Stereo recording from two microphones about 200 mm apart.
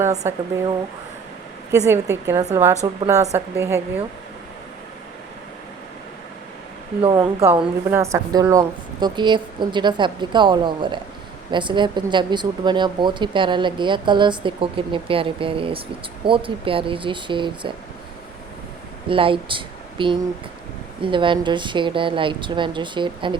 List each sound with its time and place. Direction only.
0.0 s a woman's voice: 15° right (ahead or behind)
1.9 s a woman's voice: 15° right (ahead or behind)
7.0 s speech: 25° right (ahead or behind)
19.0 s speech: 25° right (ahead or behind)